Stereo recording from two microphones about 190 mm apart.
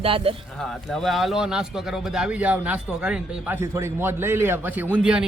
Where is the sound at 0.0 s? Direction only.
30° right (ahead or behind).